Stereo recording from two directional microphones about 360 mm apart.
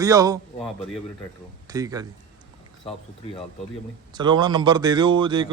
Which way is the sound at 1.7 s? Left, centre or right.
Centre.